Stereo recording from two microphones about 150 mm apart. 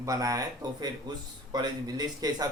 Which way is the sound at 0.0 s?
25° right (ahead or behind).